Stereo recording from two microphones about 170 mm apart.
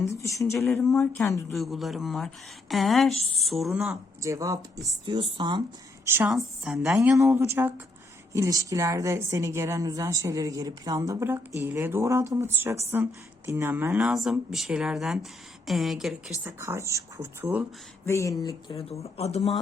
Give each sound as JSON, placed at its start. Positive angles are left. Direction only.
{"t": 0.0, "sound": "speech", "side_deg": 15}
{"t": 1.5, "sound": "speech", "side_deg": 0}
{"t": 4.2, "sound": "speech", "side_deg": -20}
{"t": 6.1, "sound": "a woman's voice", "side_deg": -5}
{"t": 16.4, "sound": "a woman's voice", "side_deg": -15}
{"t": 18.0, "sound": "speech", "side_deg": 15}
{"t": 18.7, "sound": "speech", "side_deg": 35}